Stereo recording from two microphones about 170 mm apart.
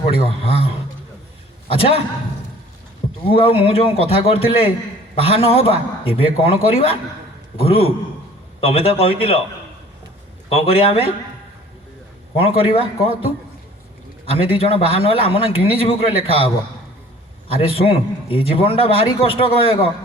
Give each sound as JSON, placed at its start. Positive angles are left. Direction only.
{"t": 0.0, "sound": "a man's voice", "side_deg": 35}
{"t": 3.2, "sound": "a man's voice", "side_deg": 30}
{"t": 10.5, "sound": "a man's voice", "side_deg": 35}
{"t": 12.4, "sound": "a man's voice", "side_deg": 30}
{"t": 14.3, "sound": "a man's voice", "side_deg": 35}
{"t": 17.5, "sound": "a man's voice", "side_deg": 35}